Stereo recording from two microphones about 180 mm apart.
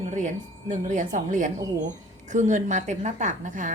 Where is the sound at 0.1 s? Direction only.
45° right (ahead or behind).